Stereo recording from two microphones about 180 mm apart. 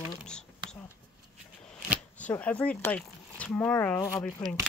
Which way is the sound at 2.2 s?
10° left (ahead or behind).